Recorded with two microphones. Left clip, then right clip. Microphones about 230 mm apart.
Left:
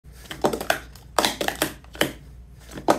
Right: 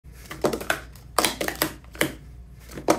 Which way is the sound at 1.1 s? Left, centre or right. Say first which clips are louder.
Left 2 dB; centre.